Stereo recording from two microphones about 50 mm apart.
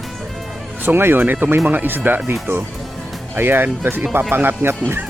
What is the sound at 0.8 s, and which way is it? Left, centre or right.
Speech, right.